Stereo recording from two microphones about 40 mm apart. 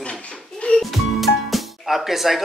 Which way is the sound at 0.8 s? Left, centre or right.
Centre.